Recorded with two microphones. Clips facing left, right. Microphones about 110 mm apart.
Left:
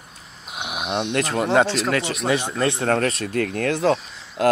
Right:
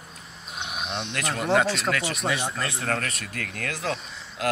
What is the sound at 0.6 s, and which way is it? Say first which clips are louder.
Cricket: left 7 dB; 70° left (ahead or behind).